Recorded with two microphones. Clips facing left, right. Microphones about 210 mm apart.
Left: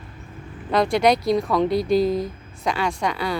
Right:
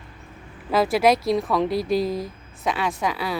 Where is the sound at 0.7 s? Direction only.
5° right (ahead or behind).